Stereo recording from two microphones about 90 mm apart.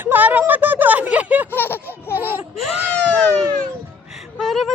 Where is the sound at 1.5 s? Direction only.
25° left (ahead or behind).